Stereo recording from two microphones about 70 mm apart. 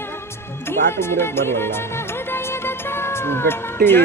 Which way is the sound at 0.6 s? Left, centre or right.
Left.